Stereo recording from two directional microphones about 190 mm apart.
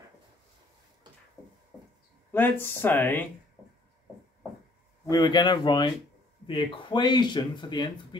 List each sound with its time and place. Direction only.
1.4 s a sound: centre (ahead or behind)
2.3 s speech: 10° left (ahead or behind)
5.1 s speech: 20° left (ahead or behind)